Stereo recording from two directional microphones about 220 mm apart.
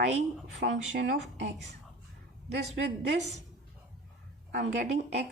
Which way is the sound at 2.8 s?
50° right (ahead or behind).